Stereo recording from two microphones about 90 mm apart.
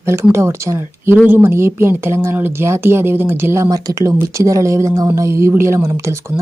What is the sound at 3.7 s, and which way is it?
Speech, 40° right (ahead or behind).